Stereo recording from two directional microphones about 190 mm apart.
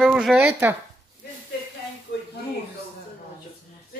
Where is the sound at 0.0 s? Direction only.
Centre (ahead or behind).